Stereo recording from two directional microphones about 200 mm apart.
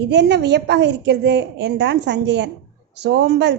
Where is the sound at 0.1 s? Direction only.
60° right (ahead or behind).